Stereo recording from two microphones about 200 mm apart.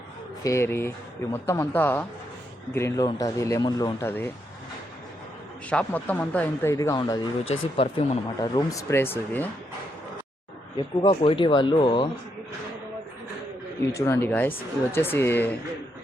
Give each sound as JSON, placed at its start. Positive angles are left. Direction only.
{"t": 0.4, "sound": "speech", "side_deg": 15}
{"t": 5.6, "sound": "speech", "side_deg": 5}
{"t": 7.5, "sound": "speech", "side_deg": 30}
{"t": 10.8, "sound": "speech", "side_deg": 25}
{"t": 13.9, "sound": "speech", "side_deg": 15}